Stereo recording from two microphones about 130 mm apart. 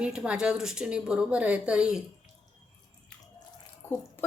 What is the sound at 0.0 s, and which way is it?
A woman's voice, 5° right (ahead or behind).